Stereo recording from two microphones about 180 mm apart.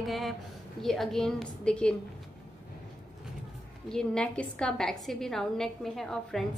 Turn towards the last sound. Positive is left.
turn(degrees=0)  # may be behind; listen again after turning